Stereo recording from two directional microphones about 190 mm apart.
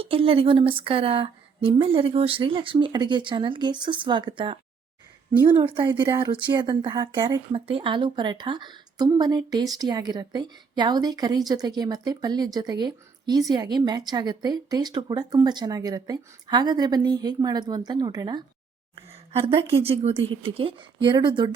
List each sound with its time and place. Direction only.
0.0 s a woman's voice: 30° right (ahead or behind)